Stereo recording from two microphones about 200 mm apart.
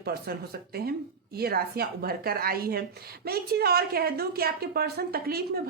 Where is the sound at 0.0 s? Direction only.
50° right (ahead or behind).